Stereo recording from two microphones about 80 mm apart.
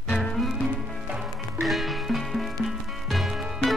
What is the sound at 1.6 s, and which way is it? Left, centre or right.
Music, centre.